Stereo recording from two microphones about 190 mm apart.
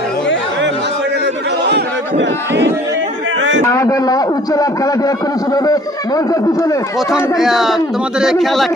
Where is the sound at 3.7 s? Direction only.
15° left (ahead or behind).